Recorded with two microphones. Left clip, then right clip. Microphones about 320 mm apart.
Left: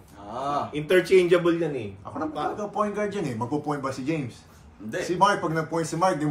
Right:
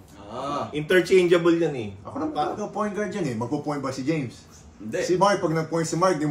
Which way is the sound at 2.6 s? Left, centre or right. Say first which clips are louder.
Left 1 dB; centre.